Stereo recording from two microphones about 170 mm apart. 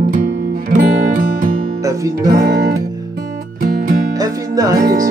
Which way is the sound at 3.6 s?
60° right (ahead or behind).